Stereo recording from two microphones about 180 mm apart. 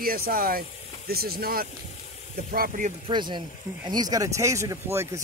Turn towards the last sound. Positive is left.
turn(degrees=-15)  # may be behind; listen again after turning